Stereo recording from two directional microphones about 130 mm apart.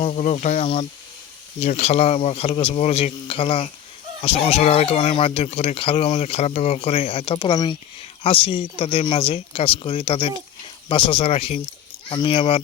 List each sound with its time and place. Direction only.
0.0 s speech: 60° left (ahead or behind)
7.5 s speech: 35° left (ahead or behind)
8.2 s speech: 45° left (ahead or behind)